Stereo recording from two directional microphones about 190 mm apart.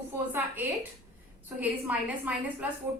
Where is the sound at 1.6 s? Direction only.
10° right (ahead or behind).